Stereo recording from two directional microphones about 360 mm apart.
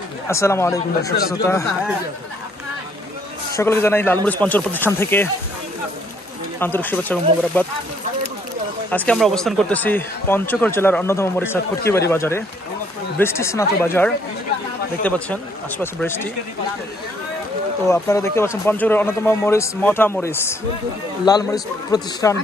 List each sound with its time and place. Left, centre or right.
0.3 s a man's voice: centre
3.5 s speech: centre
6.6 s speech: centre
8.9 s a man's voice: centre
17.8 s a man's voice: centre